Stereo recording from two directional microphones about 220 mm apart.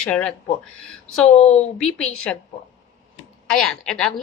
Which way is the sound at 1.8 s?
5° left (ahead or behind).